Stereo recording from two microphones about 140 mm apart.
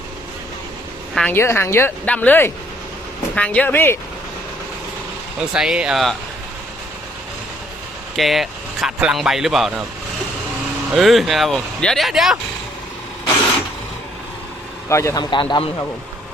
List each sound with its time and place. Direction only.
1.3 s speech: 15° left (ahead or behind)
5.4 s speech: 5° right (ahead or behind)
8.1 s speech: centre (ahead or behind)
10.9 s speech: centre (ahead or behind)
14.8 s speech: 20° left (ahead or behind)